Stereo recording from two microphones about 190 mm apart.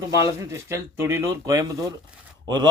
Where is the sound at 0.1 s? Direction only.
15° right (ahead or behind).